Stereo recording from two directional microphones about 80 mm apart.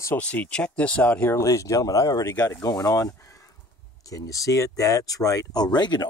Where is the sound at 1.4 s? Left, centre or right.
Left.